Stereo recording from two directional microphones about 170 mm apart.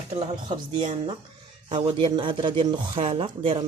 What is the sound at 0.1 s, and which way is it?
Speech, 25° right (ahead or behind).